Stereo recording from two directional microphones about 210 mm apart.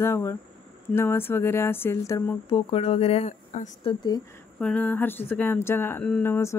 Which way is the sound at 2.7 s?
30° left (ahead or behind).